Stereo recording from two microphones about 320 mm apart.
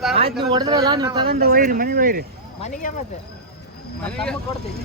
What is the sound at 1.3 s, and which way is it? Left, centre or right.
Speech, right.